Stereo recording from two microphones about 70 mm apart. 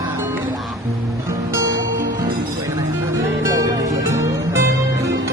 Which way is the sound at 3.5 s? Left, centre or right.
Right.